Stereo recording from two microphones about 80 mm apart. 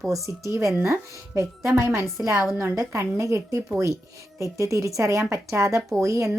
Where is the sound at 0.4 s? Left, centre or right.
Right.